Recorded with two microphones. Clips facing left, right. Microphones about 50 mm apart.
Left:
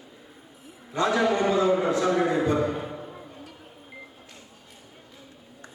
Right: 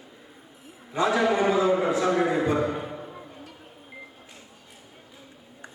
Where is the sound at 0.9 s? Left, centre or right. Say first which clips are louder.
Even; centre.